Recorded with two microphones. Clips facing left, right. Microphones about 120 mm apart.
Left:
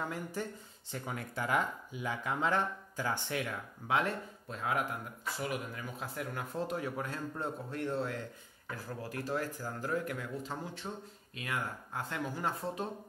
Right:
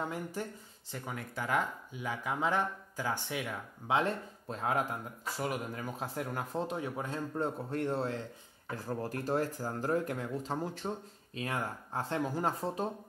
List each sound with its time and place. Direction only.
0.0 s speech: 15° right (ahead or behind)
0.9 s speech: centre (ahead or behind)
3.8 s speech: 25° right (ahead or behind)
6.7 s speech: 20° right (ahead or behind)
7.3 s speech: 40° right (ahead or behind)
9.0 s speech: 40° right (ahead or behind)